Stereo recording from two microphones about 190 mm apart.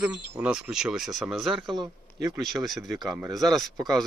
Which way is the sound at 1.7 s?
25° right (ahead or behind).